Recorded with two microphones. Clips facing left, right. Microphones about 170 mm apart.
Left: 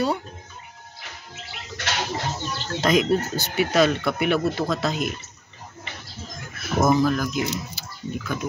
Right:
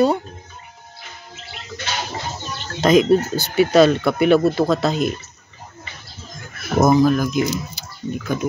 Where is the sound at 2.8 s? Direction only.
30° right (ahead or behind).